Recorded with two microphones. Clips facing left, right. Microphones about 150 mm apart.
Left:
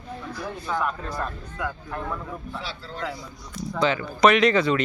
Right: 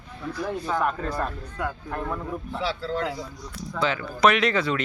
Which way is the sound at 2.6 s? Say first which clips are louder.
Right 7 dB; 90° right.